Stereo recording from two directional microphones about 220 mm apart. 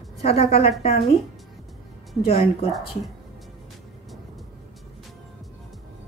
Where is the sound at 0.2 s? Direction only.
25° left (ahead or behind).